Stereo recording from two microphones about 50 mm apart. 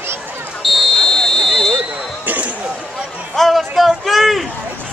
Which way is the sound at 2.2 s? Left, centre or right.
Right.